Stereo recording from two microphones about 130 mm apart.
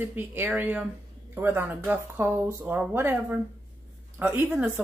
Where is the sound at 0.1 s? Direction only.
15° right (ahead or behind).